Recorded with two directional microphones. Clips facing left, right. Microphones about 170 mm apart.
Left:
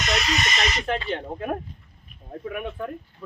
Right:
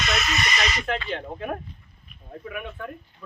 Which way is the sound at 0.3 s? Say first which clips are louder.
Left 1 dB; 25° left (ahead or behind).